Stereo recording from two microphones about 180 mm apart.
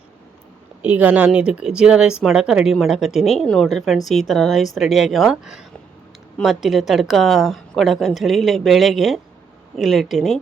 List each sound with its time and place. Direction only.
0.8 s speech: 10° right (ahead or behind)